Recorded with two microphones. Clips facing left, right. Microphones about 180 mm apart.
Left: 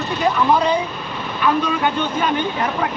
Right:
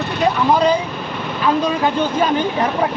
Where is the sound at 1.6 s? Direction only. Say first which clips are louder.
Right 3 dB; 35° right (ahead or behind).